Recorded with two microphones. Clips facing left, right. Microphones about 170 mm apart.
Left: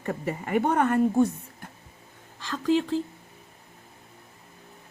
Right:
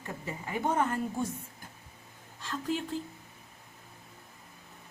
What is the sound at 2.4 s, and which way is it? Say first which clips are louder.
Speech: left 9 dB; 90° left.